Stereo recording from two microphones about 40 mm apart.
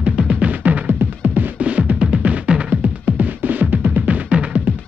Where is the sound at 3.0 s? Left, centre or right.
Right.